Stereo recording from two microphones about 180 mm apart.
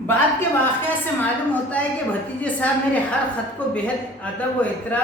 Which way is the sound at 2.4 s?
5° left (ahead or behind).